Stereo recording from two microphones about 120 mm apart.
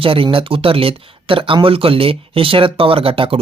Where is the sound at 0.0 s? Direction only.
50° right (ahead or behind).